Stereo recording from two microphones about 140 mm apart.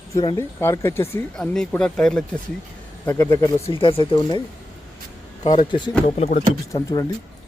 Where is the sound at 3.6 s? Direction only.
40° left (ahead or behind).